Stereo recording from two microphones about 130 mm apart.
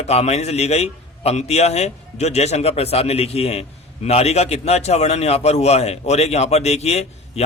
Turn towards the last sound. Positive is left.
turn(degrees=55)  # may be behind; listen again after turning